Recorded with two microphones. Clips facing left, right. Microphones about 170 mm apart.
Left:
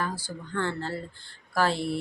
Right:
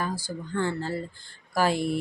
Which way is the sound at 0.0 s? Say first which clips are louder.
Right 2 dB; 15° right (ahead or behind).